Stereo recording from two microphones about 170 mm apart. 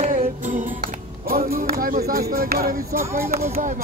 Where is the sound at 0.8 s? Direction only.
60° right (ahead or behind).